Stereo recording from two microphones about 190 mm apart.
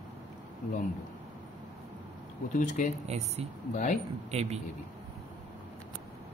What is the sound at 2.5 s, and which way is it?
Speech, 40° left (ahead or behind).